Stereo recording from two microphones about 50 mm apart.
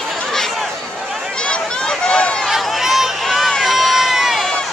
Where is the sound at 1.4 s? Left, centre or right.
Centre.